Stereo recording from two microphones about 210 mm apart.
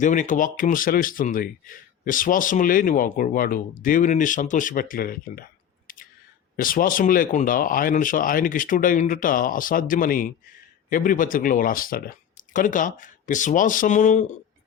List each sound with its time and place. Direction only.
0.0 s speech: 35° left (ahead or behind)
5.9 s a sound: 40° left (ahead or behind)
6.6 s speech: 40° left (ahead or behind)